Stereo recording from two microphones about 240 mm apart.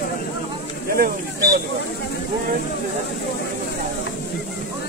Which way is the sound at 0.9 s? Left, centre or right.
Right.